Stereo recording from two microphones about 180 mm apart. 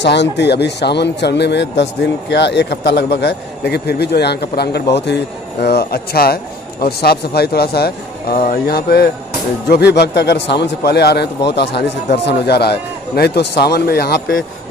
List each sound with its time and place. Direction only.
0.0 s a man's voice: 75° left (ahead or behind)